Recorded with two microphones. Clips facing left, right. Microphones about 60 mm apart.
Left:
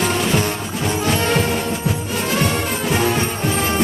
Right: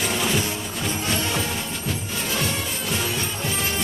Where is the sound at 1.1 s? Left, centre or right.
Left.